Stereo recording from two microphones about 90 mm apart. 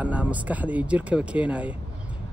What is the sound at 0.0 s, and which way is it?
Speech, 15° right (ahead or behind).